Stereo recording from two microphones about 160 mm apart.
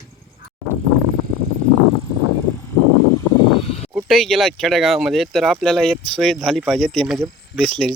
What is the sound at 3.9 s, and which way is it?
Speech, centre (ahead or behind).